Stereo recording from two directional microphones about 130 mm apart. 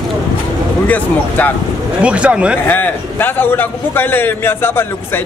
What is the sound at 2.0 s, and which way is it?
Speech, 10° right (ahead or behind).